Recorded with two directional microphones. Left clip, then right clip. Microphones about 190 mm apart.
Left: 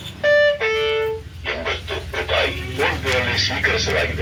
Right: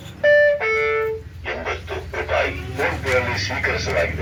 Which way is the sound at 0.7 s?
40° right (ahead or behind).